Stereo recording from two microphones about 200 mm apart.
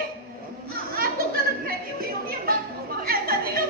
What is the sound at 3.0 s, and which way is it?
Chatter, 50° right (ahead or behind).